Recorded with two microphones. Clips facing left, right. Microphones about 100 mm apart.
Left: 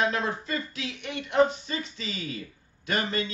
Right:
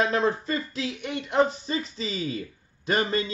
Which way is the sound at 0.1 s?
35° right (ahead or behind).